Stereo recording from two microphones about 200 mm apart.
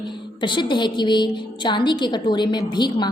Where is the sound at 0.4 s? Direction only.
25° left (ahead or behind).